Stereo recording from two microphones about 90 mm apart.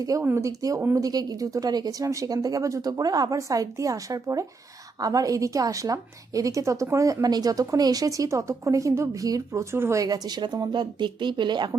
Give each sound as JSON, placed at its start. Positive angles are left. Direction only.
{"t": 0.0, "sound": "a woman's voice", "side_deg": -40}
{"t": 10.0, "sound": "speech", "side_deg": -45}